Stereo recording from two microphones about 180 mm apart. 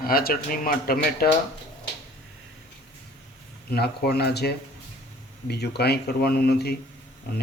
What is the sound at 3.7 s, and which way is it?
Speech, 60° left (ahead or behind).